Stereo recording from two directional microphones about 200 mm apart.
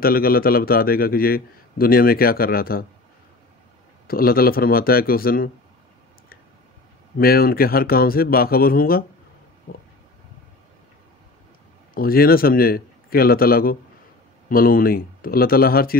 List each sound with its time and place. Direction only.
0.0 s a man's voice: 50° left (ahead or behind)
4.1 s a man's voice: 50° left (ahead or behind)
7.2 s a man's voice: 50° left (ahead or behind)
11.9 s a man's voice: 50° left (ahead or behind)